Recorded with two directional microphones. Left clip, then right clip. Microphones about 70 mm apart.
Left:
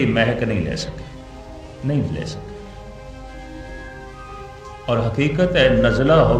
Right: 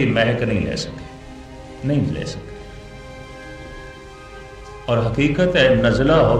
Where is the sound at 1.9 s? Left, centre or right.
Left.